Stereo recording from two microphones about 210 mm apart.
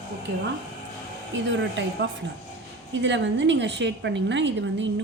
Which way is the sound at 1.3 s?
60° right (ahead or behind).